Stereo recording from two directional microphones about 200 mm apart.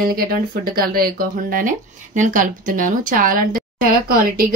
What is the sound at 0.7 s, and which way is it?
Speech, 45° right (ahead or behind).